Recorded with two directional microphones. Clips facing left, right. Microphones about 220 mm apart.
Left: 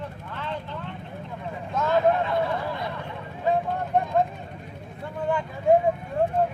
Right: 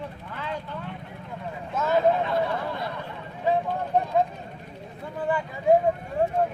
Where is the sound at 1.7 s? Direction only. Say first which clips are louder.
Even; 5° right (ahead or behind).